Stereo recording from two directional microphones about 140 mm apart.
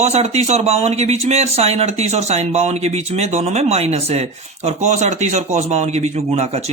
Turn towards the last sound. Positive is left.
turn(degrees=-50)  # may be behind; listen again after turning